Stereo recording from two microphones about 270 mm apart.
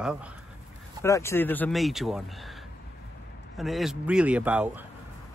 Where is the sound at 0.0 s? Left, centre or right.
Centre.